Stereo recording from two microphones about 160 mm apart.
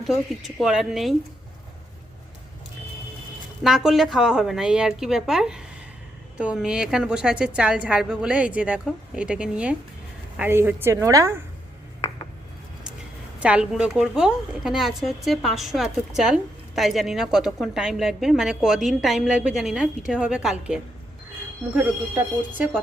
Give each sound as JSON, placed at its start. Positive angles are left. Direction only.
{"t": 0.0, "sound": "a woman's voice", "side_deg": 0}
{"t": 3.6, "sound": "a woman's voice", "side_deg": -5}
{"t": 13.4, "sound": "a woman's voice", "side_deg": -5}